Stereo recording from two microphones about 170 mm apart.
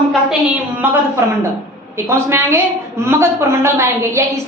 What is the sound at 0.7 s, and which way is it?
A woman's voice, 10° right (ahead or behind).